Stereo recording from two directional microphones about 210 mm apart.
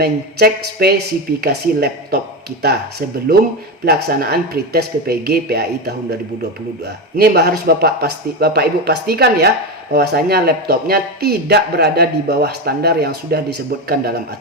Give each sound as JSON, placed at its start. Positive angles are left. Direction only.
{"t": 0.0, "sound": "speech", "side_deg": -50}
{"t": 3.8, "sound": "speech", "side_deg": -50}
{"t": 7.2, "sound": "speech", "side_deg": -50}